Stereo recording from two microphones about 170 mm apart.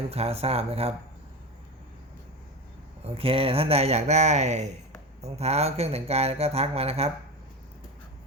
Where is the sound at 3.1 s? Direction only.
35° right (ahead or behind).